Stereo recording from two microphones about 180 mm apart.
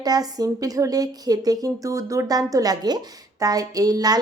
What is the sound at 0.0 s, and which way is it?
A woman's voice, 20° right (ahead or behind).